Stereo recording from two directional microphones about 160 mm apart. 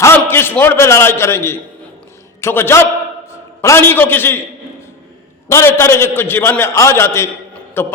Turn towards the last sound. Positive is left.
turn(degrees=15)  # may be behind; listen again after turning